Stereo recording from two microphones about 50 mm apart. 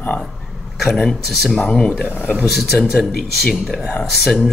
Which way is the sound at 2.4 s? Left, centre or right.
Centre.